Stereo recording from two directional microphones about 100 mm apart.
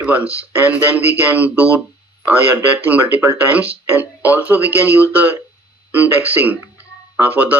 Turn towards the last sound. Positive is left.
turn(degrees=-20)  # may be behind; listen again after turning